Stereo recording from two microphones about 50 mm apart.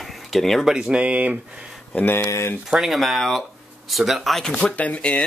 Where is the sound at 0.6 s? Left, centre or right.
Centre.